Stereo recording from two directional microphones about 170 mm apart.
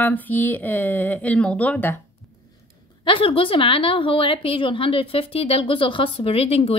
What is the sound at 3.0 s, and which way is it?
A woman's voice, 30° left (ahead or behind).